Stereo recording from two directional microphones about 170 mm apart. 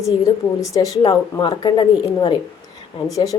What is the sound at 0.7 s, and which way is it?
A woman's voice, 20° left (ahead or behind).